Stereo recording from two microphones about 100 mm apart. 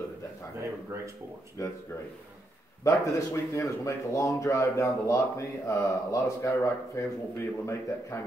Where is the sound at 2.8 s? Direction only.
30° left (ahead or behind).